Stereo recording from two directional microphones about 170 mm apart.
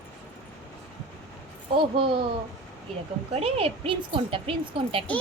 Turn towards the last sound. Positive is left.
turn(degrees=-35)  # may be behind; listen again after turning